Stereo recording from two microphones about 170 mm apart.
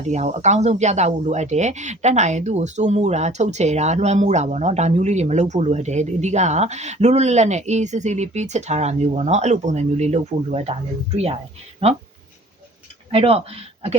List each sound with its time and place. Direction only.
0.1 s speech: 45° right (ahead or behind)
13.1 s speech: 35° right (ahead or behind)